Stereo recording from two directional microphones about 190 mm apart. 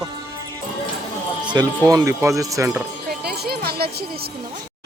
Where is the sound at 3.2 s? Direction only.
55° right (ahead or behind).